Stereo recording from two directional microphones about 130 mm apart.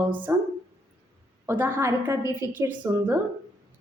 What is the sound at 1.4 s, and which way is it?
A woman's voice, 15° right (ahead or behind).